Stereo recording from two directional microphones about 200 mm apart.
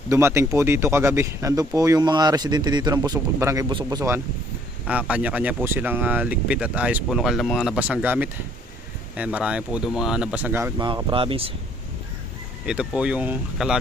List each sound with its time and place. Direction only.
0.1 s speech: 15° right (ahead or behind)
10.8 s speech: 25° right (ahead or behind)
12.6 s speech: 5° right (ahead or behind)